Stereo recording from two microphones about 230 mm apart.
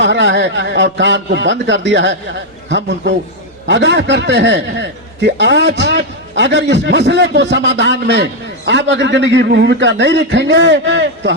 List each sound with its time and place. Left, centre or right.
0.0 s a man's voice: right